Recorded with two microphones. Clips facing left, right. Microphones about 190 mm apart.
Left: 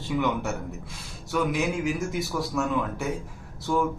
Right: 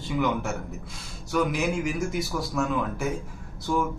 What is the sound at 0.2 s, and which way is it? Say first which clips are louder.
A man's voice: right 3 dB; centre (ahead or behind).